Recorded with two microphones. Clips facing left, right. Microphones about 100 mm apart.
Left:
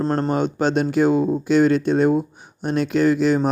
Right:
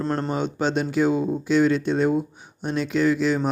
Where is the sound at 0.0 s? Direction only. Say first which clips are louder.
Left 4 dB; 40° left (ahead or behind).